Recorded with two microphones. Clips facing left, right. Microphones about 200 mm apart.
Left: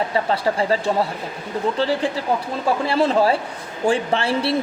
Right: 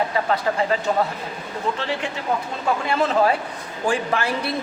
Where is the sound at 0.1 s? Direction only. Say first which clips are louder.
Left 2 dB; 30° left (ahead or behind).